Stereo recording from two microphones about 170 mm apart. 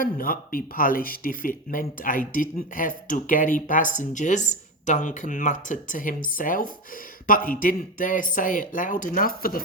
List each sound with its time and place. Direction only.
0.0 s speech: 55° left (ahead or behind)